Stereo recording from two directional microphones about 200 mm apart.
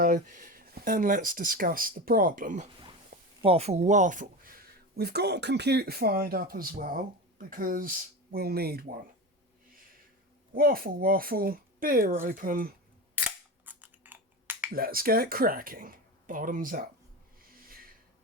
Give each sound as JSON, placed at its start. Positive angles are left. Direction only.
{"t": 0.0, "sound": "speech", "side_deg": -40}
{"t": 3.4, "sound": "speech", "side_deg": -30}
{"t": 4.9, "sound": "speech", "side_deg": -55}
{"t": 10.5, "sound": "speech", "side_deg": -45}
{"t": 13.1, "sound": "camera", "side_deg": -10}
{"t": 14.7, "sound": "speech", "side_deg": -45}